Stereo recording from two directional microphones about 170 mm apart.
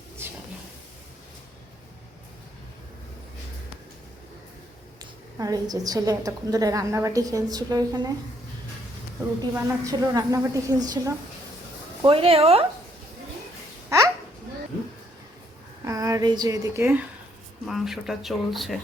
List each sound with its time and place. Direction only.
4.9 s a woman's voice: 20° right (ahead or behind)
9.6 s a woman's voice: 15° right (ahead or behind)
12.0 s speech: 35° right (ahead or behind)
15.8 s a woman's voice: 20° right (ahead or behind)
17.7 s speech: centre (ahead or behind)